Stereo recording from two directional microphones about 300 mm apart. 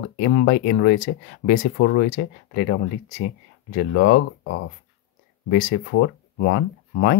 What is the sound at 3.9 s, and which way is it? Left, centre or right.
Speech, left.